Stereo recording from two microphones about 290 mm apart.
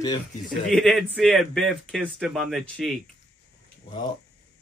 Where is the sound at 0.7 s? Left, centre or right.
Centre.